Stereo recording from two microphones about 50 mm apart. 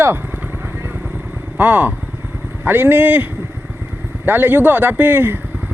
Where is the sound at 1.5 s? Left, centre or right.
Right.